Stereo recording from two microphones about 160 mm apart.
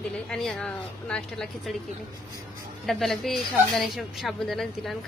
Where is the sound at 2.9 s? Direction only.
Centre (ahead or behind).